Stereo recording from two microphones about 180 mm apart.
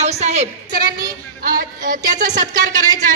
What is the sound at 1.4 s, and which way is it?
Music, 55° right (ahead or behind).